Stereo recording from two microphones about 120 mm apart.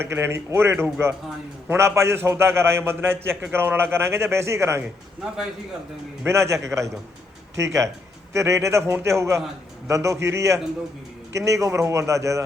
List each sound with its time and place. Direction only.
0.0 s a man's voice: 20° right (ahead or behind)
6.2 s a man's voice: 25° right (ahead or behind)